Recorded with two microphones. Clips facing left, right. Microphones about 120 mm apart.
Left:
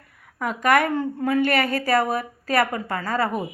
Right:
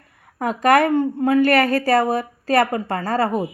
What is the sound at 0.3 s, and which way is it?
A woman's voice, 35° right (ahead or behind).